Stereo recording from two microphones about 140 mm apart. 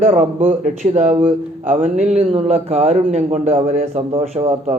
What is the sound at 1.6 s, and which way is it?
Speech, 65° right (ahead or behind).